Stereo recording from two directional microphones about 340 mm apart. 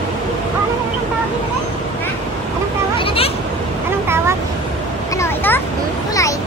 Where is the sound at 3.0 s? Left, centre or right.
Centre.